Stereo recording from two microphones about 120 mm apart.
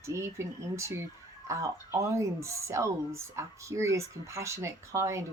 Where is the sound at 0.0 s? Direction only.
25° right (ahead or behind).